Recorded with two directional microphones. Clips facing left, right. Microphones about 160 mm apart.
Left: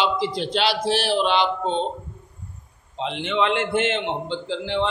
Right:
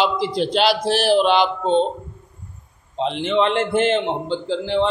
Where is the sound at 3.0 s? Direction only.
35° right (ahead or behind).